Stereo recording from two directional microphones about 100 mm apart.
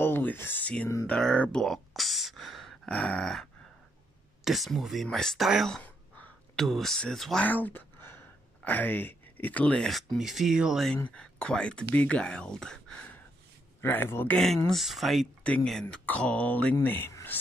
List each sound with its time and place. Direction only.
0.0 s speech: 20° left (ahead or behind); by 3.4 s 5° left (ahead or behind)
4.5 s speech: centre (ahead or behind)
5.7 s a sound: 15° left (ahead or behind)
6.6 s speech: 5° left (ahead or behind)
7.4 s a sound: 15° left (ahead or behind)
8.6 s speech: 20° left (ahead or behind)
9.8 s speech: centre (ahead or behind)
11.1 s speech: 10° left (ahead or behind)
13.7 s speech: 20° left (ahead or behind)
14.7 s speech: centre (ahead or behind)
15.4 s speech: 10° left (ahead or behind)
17.1 s a sound: 25° left (ahead or behind)